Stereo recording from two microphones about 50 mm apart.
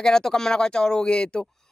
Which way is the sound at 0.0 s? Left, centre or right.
Centre.